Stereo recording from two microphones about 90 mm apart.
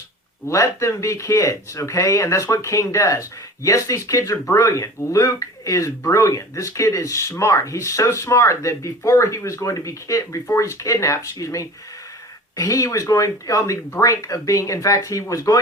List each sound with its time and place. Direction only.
0.4 s speech: 35° left (ahead or behind)